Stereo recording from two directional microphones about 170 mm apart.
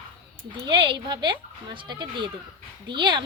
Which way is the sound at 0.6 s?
25° right (ahead or behind).